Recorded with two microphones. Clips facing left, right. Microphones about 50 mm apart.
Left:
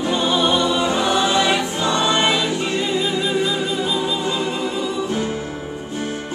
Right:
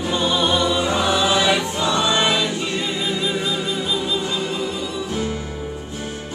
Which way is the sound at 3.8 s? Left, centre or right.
Centre.